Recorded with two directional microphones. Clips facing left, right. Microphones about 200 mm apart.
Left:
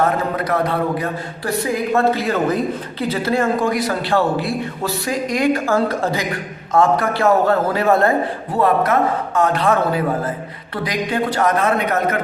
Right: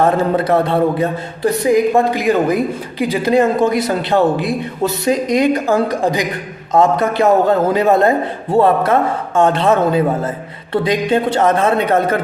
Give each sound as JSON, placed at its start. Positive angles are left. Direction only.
{"t": 0.3, "sound": "a man's voice", "side_deg": -25}